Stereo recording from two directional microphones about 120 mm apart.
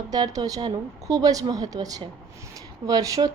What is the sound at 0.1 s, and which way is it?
A woman's voice, 30° right (ahead or behind).